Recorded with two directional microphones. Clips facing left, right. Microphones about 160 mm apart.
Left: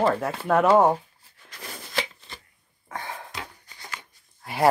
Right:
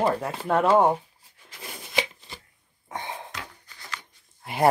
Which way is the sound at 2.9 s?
20° right (ahead or behind).